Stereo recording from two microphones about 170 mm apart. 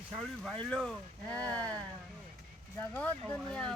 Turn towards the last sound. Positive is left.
turn(degrees=5)  # may be behind; listen again after turning